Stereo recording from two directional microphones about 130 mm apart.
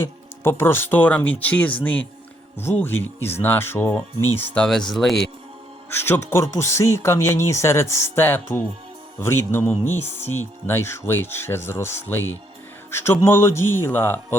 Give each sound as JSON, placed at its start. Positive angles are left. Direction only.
{"t": 0.0, "sound": "speech", "side_deg": 20}
{"t": 5.9, "sound": "speech", "side_deg": 20}